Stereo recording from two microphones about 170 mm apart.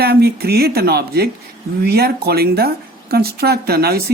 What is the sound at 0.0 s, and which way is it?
Speech, 65° right (ahead or behind).